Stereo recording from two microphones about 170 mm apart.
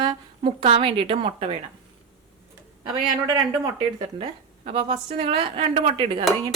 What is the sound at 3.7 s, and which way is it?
A woman's voice, 30° right (ahead or behind).